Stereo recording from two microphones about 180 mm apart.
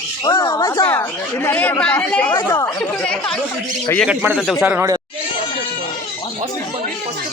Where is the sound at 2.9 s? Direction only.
5° left (ahead or behind).